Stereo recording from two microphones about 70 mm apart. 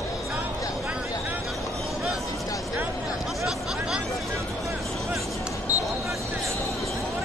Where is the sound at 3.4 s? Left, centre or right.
Centre.